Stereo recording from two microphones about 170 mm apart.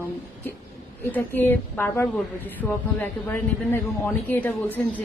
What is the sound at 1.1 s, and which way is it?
A man's voice, 10° left (ahead or behind).